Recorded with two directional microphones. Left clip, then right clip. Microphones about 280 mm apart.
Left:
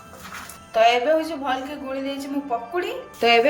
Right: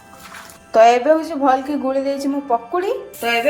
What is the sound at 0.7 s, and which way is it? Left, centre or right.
Music, right.